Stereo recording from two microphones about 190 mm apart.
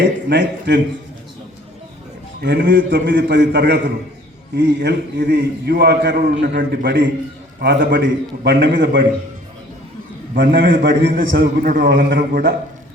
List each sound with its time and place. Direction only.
0.0 s a man's voice: 65° right (ahead or behind)
2.4 s a man's voice: 60° right (ahead or behind)
10.3 s a man's voice: 55° right (ahead or behind)